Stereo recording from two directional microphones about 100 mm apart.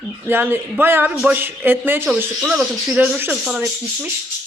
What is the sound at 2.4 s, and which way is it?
Speech, 5° right (ahead or behind).